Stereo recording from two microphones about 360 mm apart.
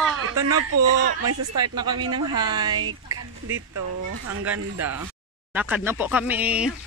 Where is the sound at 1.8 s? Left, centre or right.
Centre.